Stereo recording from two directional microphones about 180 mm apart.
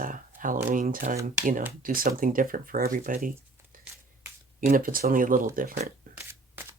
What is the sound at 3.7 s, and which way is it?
Finger snapping, 50° right (ahead or behind).